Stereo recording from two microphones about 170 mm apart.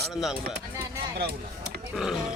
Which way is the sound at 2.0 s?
5° right (ahead or behind).